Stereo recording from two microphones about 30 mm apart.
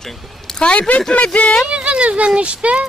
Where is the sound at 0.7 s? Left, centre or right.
Left.